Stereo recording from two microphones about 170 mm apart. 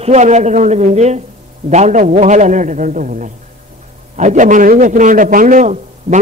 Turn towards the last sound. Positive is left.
turn(degrees=-45)  # may be behind; listen again after turning